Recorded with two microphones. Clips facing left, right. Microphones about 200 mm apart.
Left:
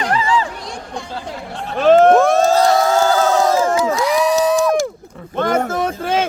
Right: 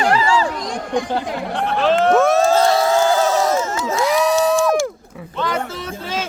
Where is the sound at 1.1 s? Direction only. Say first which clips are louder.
Right 6 dB; 75° right (ahead or behind).